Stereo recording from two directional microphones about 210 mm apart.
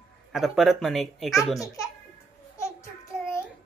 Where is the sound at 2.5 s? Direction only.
15° left (ahead or behind).